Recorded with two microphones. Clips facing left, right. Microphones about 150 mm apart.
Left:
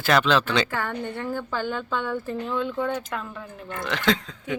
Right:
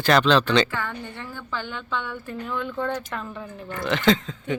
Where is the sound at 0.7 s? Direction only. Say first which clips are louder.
Left 3 dB; 50° left (ahead or behind).